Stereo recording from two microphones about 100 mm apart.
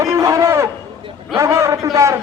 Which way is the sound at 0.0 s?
35° right (ahead or behind).